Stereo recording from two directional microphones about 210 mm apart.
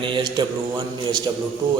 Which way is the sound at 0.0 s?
20° right (ahead or behind).